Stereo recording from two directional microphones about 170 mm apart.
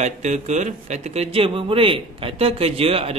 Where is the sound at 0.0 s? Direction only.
40° right (ahead or behind).